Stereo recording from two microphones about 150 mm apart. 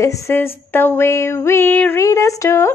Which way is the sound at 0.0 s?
20° left (ahead or behind).